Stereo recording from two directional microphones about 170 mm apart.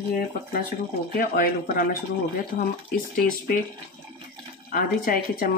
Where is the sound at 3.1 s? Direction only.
55° left (ahead or behind).